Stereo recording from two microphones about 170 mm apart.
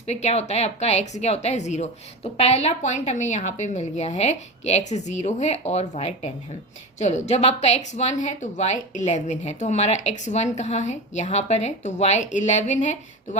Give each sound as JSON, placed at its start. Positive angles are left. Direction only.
{"t": 0.0, "sound": "a woman's voice", "side_deg": 40}